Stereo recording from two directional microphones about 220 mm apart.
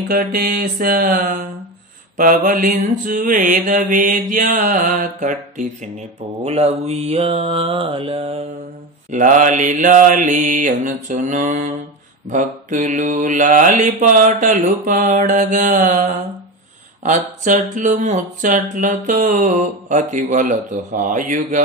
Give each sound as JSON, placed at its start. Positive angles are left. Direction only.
{"t": 0.1, "sound": "speech", "side_deg": -40}
{"t": 6.4, "sound": "mantra", "side_deg": -30}
{"t": 9.1, "sound": "speech", "side_deg": -35}